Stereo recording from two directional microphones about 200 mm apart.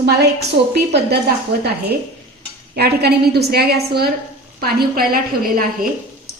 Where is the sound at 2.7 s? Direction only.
55° right (ahead or behind).